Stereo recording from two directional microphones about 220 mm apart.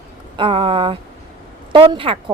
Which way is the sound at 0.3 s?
25° right (ahead or behind).